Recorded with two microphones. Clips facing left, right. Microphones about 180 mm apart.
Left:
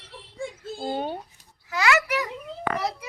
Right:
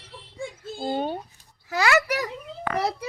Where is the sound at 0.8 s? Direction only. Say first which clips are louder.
Right 2 dB; 5° left (ahead or behind).